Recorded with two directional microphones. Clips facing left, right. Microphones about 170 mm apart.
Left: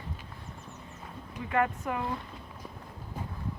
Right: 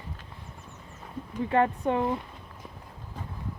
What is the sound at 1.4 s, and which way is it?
Speech, 30° right (ahead or behind).